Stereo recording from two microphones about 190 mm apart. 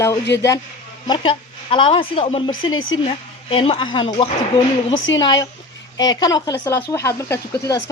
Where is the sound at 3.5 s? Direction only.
30° left (ahead or behind).